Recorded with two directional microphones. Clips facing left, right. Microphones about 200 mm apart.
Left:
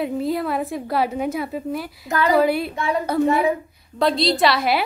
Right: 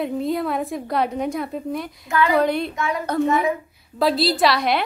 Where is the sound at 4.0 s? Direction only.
5° right (ahead or behind).